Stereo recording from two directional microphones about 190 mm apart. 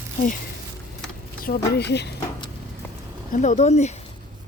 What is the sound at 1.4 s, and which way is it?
Speech, 55° left (ahead or behind).